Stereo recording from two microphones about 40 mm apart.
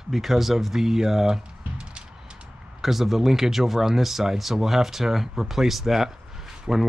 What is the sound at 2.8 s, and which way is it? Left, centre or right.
Speech, centre.